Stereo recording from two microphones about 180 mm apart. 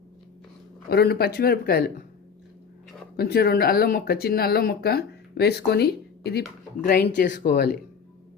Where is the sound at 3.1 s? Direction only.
60° left (ahead or behind).